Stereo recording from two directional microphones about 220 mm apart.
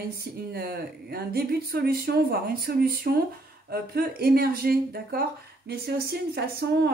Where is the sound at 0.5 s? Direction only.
45° right (ahead or behind).